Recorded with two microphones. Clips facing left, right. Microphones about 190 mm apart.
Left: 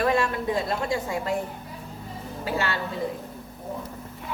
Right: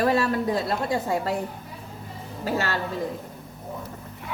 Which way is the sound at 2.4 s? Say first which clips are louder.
Right 2 dB; 40° right (ahead or behind).